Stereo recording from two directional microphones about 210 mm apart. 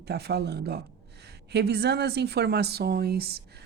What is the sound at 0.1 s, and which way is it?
Speech, 50° right (ahead or behind).